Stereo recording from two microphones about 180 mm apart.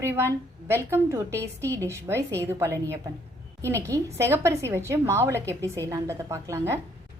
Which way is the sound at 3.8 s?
15° right (ahead or behind).